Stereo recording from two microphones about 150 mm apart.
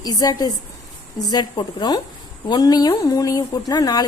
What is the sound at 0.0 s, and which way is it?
A woman's voice, 25° left (ahead or behind).